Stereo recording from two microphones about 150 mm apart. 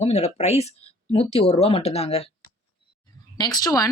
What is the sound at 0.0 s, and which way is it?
Speech, 45° left (ahead or behind).